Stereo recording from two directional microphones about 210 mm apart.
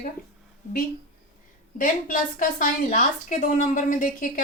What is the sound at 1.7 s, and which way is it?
A woman's voice, 40° left (ahead or behind).